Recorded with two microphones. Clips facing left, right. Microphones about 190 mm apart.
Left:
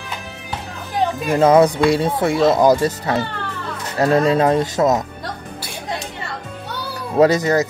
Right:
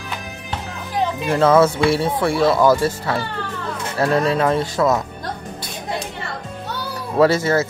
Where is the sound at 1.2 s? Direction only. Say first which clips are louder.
Left 2 dB; 15° left (ahead or behind).